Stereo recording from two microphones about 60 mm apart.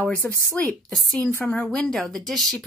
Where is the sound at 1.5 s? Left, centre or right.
Centre.